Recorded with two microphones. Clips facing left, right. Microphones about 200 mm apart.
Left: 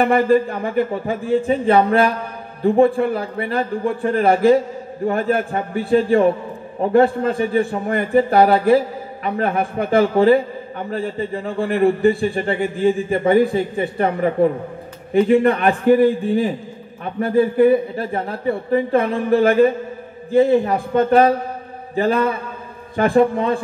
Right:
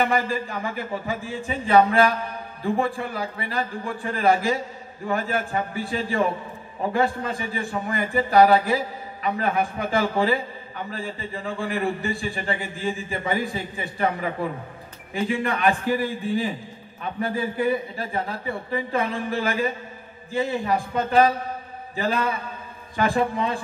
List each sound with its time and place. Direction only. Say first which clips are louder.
0.0 s a man's voice: left 9 dB; 55° left (ahead or behind)